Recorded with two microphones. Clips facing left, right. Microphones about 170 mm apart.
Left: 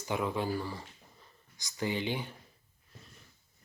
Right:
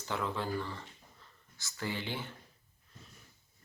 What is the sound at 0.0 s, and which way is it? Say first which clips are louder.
Speech: left 3 dB; 15° left (ahead or behind).